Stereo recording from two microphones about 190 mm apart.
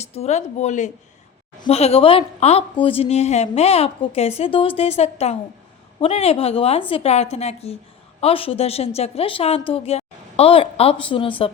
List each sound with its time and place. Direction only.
0.0 s a woman's voice: 35° left (ahead or behind)